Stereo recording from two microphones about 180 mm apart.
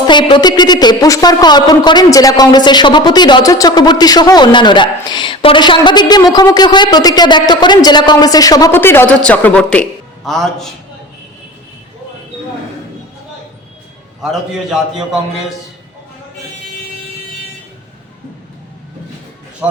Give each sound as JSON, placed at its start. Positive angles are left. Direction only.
{"t": 0.1, "sound": "a woman's voice", "side_deg": 25}